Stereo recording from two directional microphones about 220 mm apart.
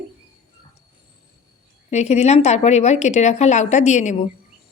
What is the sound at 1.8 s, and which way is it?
A woman's voice, 30° left (ahead or behind).